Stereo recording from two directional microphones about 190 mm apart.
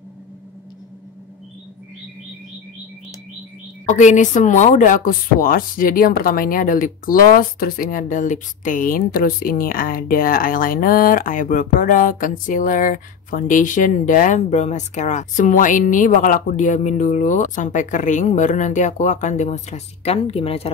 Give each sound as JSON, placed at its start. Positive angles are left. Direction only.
{"t": 3.8, "sound": "speech", "side_deg": 40}